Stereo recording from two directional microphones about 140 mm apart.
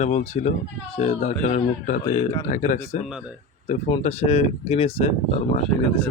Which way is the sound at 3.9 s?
45° left (ahead or behind).